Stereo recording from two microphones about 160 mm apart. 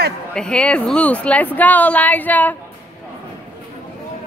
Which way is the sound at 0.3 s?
5° left (ahead or behind).